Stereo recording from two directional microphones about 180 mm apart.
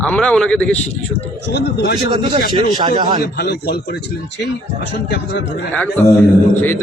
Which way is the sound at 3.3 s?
60° left (ahead or behind).